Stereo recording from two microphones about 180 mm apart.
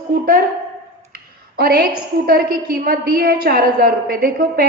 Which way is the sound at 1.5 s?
55° right (ahead or behind).